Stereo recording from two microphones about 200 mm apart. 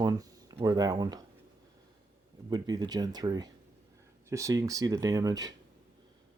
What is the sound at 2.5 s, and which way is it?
Speech, 20° right (ahead or behind).